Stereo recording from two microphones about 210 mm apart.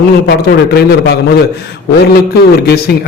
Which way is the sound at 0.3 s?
50° left (ahead or behind).